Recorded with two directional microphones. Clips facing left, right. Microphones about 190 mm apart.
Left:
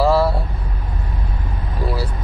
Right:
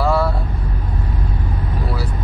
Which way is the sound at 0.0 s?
35° left (ahead or behind).